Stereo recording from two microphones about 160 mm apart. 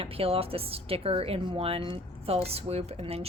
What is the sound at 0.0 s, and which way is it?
A woman's voice, 35° right (ahead or behind).